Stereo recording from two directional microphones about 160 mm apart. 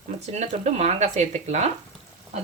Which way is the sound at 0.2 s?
45° right (ahead or behind).